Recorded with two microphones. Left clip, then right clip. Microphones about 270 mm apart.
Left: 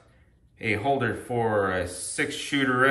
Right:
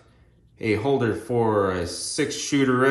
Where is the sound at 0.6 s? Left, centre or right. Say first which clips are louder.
Right 2 dB; centre.